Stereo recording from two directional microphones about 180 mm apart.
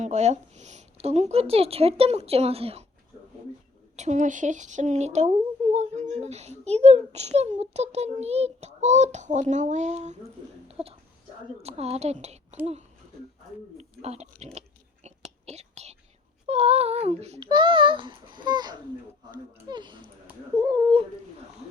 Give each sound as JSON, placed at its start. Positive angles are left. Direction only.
{"t": 0.0, "sound": "speech", "side_deg": -40}
{"t": 3.9, "sound": "speech", "side_deg": -40}
{"t": 10.7, "sound": "a sound", "side_deg": -35}
{"t": 11.6, "sound": "speech", "side_deg": -35}
{"t": 13.7, "sound": "speech", "side_deg": -35}
{"t": 15.0, "sound": "whispering", "side_deg": -35}
{"t": 16.5, "sound": "a child's voice", "side_deg": -35}